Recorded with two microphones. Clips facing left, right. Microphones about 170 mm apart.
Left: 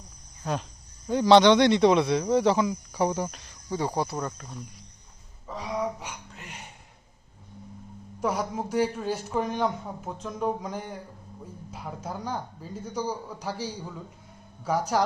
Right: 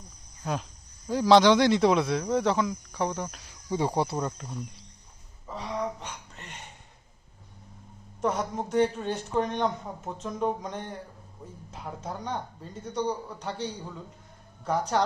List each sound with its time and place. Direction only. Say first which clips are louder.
1.0 s speech: left 2 dB; centre (ahead or behind)
3.7 s speech: right 1 dB; 25° right (ahead or behind)
5.5 s a sound: left 2 dB; 5° left (ahead or behind)
8.2 s speech: even; 5° left (ahead or behind)